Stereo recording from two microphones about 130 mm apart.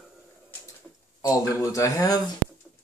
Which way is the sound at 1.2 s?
25° left (ahead or behind).